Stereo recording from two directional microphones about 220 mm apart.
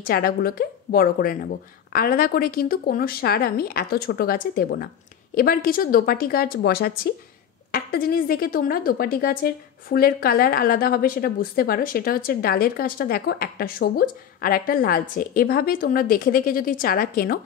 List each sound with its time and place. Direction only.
0.0 s speech: 45° left (ahead or behind)